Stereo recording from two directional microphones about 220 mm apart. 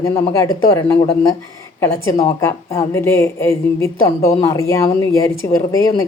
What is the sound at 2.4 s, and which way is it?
A woman's voice, 10° left (ahead or behind).